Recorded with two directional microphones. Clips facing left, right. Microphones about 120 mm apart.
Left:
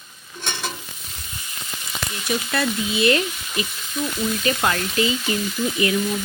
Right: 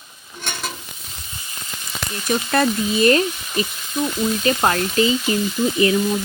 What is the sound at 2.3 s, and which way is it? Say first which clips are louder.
Speech: right 5 dB; 45° right (ahead or behind).